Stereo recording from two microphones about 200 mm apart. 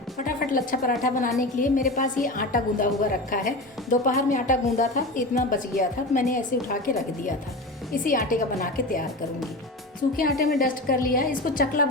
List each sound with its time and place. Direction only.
0.3 s a woman's voice: 45° left (ahead or behind)
10.2 s a woman's voice: 45° left (ahead or behind)